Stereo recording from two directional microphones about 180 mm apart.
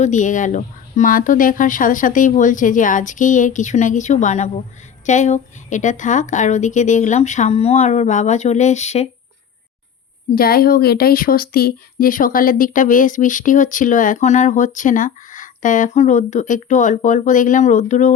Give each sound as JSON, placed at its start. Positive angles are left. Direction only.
{"t": 0.0, "sound": "a woman's voice", "side_deg": 45}
{"t": 10.3, "sound": "speech", "side_deg": 55}